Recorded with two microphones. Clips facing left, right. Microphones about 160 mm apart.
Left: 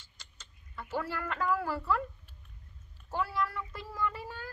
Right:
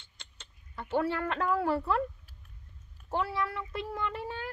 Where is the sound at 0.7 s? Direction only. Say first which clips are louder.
Right 6 dB; 25° right (ahead or behind).